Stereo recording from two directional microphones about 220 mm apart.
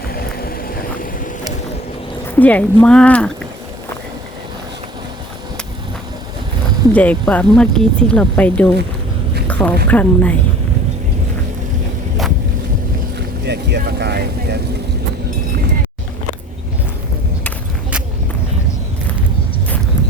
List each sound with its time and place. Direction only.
0.1 s a sound: 45° left (ahead or behind)
2.3 s speech: 5° left (ahead or behind)
6.9 s speech: 5° left (ahead or behind)
9.5 s a sound: 5° left (ahead or behind)
9.9 s speech: 5° left (ahead or behind)
13.1 s speech: 50° right (ahead or behind)